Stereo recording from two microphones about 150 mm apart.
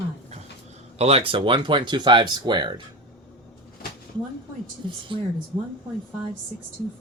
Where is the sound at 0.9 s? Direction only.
40° right (ahead or behind).